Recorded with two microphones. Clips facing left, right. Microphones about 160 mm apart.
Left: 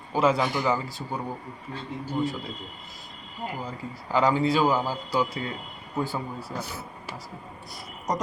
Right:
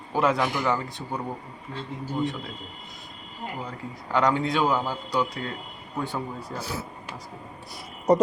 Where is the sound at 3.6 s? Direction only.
5° left (ahead or behind).